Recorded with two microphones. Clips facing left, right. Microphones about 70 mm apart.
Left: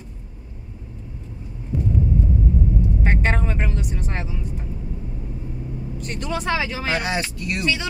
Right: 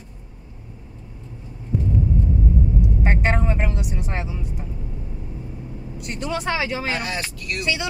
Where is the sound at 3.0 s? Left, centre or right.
Centre.